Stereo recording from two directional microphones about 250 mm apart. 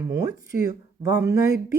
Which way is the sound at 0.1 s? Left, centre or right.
Centre.